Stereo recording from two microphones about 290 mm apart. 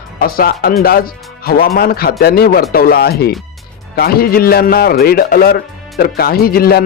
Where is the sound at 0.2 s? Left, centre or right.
Left.